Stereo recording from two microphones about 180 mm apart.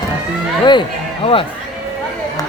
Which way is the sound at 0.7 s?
25° left (ahead or behind).